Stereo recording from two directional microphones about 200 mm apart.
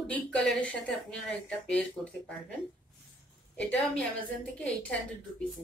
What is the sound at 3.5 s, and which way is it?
Speech, 5° left (ahead or behind).